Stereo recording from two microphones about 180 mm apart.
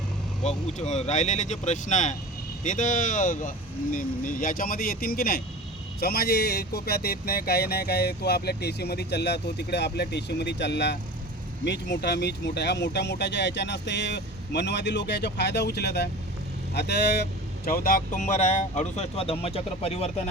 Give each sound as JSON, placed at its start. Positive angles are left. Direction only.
{"t": 0.4, "sound": "speech", "side_deg": 40}
{"t": 17.7, "sound": "speech", "side_deg": 50}